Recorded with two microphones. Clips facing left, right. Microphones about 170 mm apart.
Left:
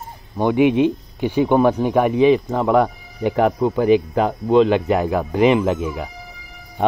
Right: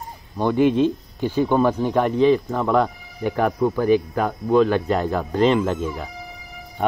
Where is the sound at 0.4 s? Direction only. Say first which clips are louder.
Left 2 dB; 15° left (ahead or behind).